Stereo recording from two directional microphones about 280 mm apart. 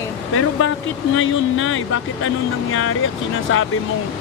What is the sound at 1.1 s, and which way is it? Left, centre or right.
Speech, left.